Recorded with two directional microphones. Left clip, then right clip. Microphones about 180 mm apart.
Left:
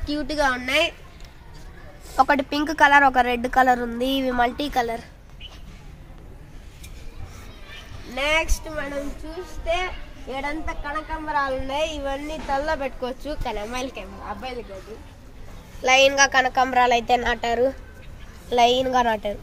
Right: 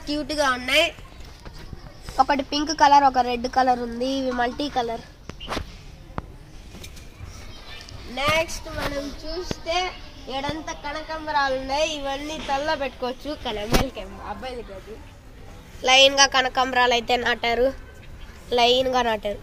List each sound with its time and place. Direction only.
0.0 s a woman's voice: 25° left (ahead or behind)
2.1 s a woman's voice: 25° left (ahead or behind)
4.6 s a woman's voice: 5° left (ahead or behind)
8.1 s a woman's voice: 60° left (ahead or behind)
10.4 s a woman's voice: 35° right (ahead or behind)
12.0 s a woman's voice: 15° right (ahead or behind)
13.0 s speech: 30° right (ahead or behind)
15.8 s a woman's voice: 5° left (ahead or behind)